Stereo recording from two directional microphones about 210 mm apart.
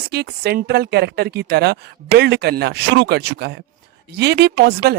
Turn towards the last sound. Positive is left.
turn(degrees=-50)  # may be behind; listen again after turning